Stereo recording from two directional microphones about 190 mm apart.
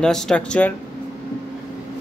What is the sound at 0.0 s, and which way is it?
Speech, 5° left (ahead or behind).